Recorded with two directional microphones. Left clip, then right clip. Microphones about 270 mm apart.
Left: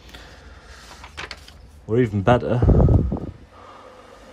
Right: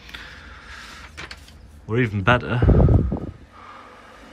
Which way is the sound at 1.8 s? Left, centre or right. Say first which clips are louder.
Left 1 dB; centre.